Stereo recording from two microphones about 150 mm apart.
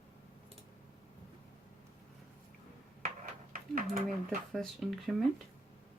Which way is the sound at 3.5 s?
70° right (ahead or behind).